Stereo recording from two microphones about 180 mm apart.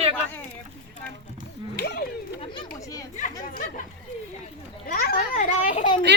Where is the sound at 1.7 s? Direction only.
60° left (ahead or behind).